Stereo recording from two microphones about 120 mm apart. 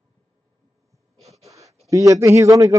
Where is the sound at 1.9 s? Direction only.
25° right (ahead or behind).